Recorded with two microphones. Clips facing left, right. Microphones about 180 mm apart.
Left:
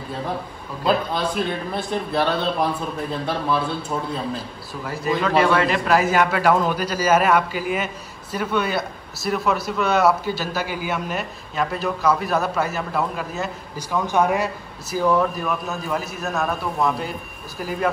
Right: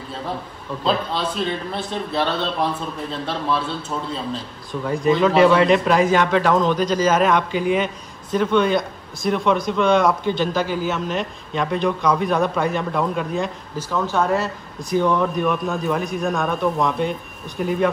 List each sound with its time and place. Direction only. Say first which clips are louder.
0.8 s a man's voice: left 1 dB; 10° left (ahead or behind)